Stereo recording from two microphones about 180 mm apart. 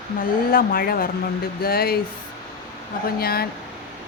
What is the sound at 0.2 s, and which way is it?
A woman's voice, 55° left (ahead or behind).